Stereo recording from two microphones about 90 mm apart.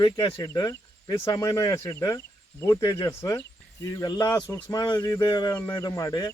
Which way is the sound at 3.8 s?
40° left (ahead or behind).